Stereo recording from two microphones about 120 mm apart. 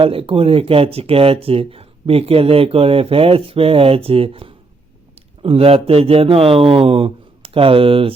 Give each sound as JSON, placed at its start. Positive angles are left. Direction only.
{"t": 0.0, "sound": "a man's voice", "side_deg": -50}